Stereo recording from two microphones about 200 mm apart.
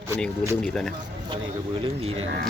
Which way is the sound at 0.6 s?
5° left (ahead or behind).